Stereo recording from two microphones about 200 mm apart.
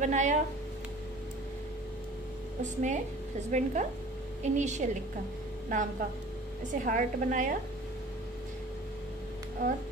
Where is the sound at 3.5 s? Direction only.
35° right (ahead or behind).